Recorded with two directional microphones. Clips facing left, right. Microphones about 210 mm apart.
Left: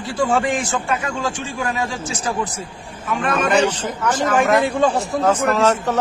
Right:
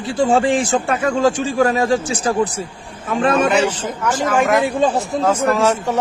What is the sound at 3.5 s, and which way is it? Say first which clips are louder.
Speech: even; 10° right (ahead or behind).